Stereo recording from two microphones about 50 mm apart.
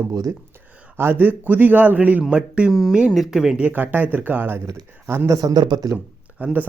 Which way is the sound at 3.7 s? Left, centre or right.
Right.